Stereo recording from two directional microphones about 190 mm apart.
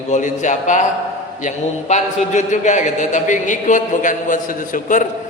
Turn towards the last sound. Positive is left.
turn(degrees=45)  # may be behind; listen again after turning